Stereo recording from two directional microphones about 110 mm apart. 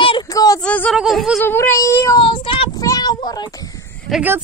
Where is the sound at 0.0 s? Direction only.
50° left (ahead or behind).